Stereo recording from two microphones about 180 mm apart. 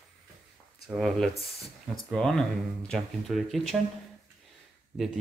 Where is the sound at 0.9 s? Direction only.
Centre (ahead or behind).